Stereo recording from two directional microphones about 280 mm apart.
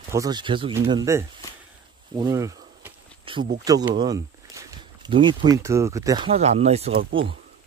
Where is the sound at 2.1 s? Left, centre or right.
Centre.